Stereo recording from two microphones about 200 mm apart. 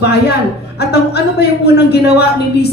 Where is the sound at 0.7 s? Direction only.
55° left (ahead or behind).